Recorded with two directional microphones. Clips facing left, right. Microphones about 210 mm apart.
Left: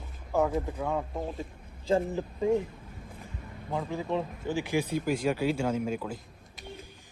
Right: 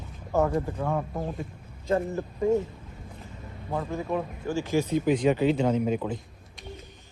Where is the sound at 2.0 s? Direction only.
15° left (ahead or behind).